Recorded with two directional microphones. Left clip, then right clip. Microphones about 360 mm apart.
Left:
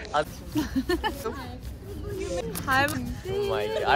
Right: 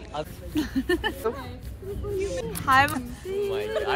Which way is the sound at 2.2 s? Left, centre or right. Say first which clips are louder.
Right 1 dB; left.